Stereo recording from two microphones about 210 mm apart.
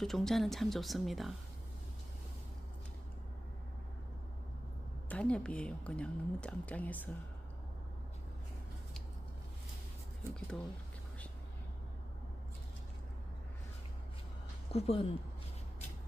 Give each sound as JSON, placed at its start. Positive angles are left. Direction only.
{"t": 0.0, "sound": "speech", "side_deg": 0}
{"t": 5.0, "sound": "speech", "side_deg": 5}
{"t": 10.5, "sound": "speech", "side_deg": 5}
{"t": 14.7, "sound": "speech", "side_deg": 30}